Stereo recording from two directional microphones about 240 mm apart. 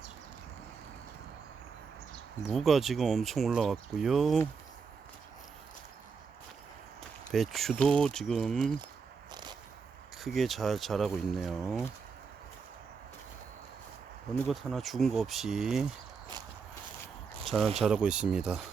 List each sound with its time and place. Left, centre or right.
2.5 s speech: centre
7.3 s speech: centre
9.3 s a sound: centre
10.2 s speech: centre
14.4 s speech: centre
17.4 s a sound: centre
17.7 s speech: centre